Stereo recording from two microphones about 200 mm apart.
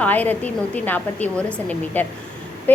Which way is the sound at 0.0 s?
10° left (ahead or behind).